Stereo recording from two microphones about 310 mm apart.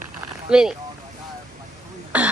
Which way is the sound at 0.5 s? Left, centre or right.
Centre.